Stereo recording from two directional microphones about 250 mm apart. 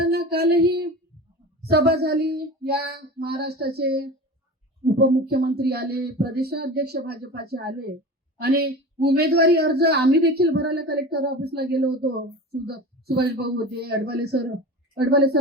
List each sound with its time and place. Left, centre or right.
0.0 s child singing: right
1.7 s a woman's voice: right